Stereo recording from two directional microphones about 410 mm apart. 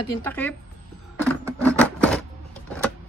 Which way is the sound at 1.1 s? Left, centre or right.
Centre.